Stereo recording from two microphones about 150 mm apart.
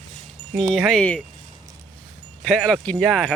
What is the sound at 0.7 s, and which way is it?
Speech, 5° left (ahead or behind).